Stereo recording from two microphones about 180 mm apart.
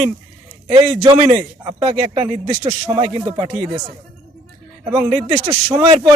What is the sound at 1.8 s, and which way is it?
A man's voice, 30° right (ahead or behind).